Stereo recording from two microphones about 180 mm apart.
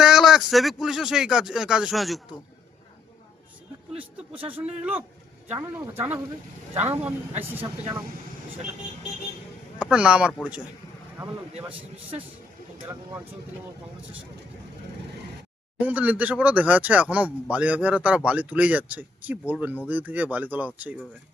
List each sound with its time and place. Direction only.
0.0 s speech: centre (ahead or behind)
3.9 s speech: 10° right (ahead or behind)
7.6 s speech: 25° right (ahead or behind)
9.7 s speech: 5° right (ahead or behind)
11.7 s speech: 10° right (ahead or behind)
15.8 s speech: 10° right (ahead or behind)